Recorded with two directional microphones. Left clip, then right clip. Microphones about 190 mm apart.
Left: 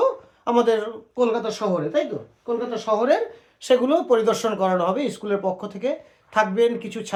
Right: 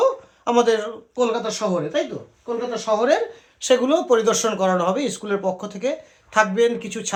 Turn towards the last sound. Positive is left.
turn(degrees=-15)  # may be behind; listen again after turning